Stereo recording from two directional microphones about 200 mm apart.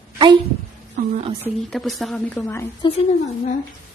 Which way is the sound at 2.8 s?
25° left (ahead or behind).